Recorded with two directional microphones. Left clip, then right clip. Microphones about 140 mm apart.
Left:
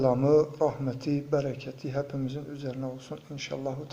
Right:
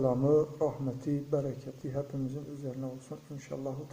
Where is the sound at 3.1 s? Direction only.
15° left (ahead or behind).